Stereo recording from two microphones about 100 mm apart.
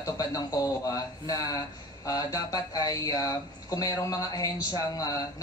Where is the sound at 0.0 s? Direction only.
35° left (ahead or behind).